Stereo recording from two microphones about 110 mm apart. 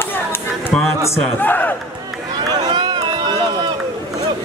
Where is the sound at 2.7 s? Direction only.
45° right (ahead or behind).